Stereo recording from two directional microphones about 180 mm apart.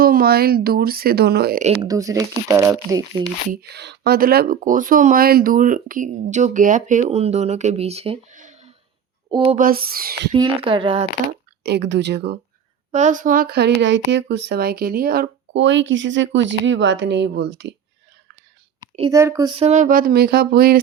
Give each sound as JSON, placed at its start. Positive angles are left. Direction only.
{"t": 0.0, "sound": "speech", "side_deg": -55}
{"t": 1.8, "sound": "speech", "side_deg": -20}
{"t": 3.5, "sound": "speech", "side_deg": -65}
{"t": 8.3, "sound": "a sound", "side_deg": -45}
{"t": 9.6, "sound": "speech", "side_deg": -55}
{"t": 10.3, "sound": "speech", "side_deg": -25}
{"t": 11.3, "sound": "speech", "side_deg": -65}
{"t": 12.9, "sound": "speech", "side_deg": -45}
{"t": 19.1, "sound": "speech", "side_deg": -15}
{"t": 19.5, "sound": "speech", "side_deg": -35}